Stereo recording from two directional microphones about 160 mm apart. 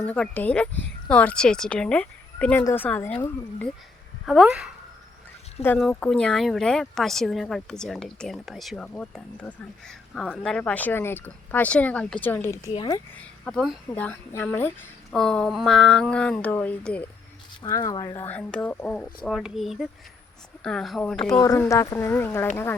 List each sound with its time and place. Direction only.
0.0 s speech: 10° left (ahead or behind)
4.3 s speech: centre (ahead or behind); by 12.7 s 15° left (ahead or behind)
12.7 s speech: 30° left (ahead or behind)
13.4 s speech: 5° left (ahead or behind)
17.6 s speech: 25° left (ahead or behind)
18.2 s speech: 10° left (ahead or behind)
21.4 s speech: 20° left (ahead or behind)